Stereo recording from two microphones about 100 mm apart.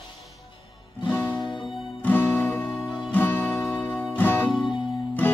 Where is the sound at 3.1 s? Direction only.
20° left (ahead or behind).